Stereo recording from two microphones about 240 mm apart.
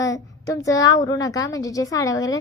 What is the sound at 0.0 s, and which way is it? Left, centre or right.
A woman's voice, centre.